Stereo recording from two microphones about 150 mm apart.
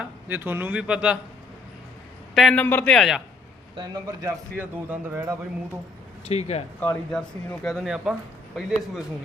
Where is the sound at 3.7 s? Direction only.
25° right (ahead or behind).